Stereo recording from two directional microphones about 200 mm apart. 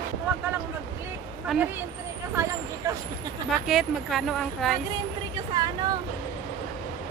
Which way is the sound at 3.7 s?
Centre (ahead or behind).